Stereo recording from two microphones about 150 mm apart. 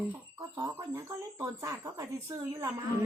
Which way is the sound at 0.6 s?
20° right (ahead or behind).